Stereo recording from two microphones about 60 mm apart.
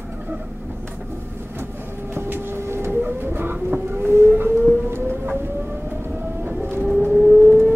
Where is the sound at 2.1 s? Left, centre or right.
Right.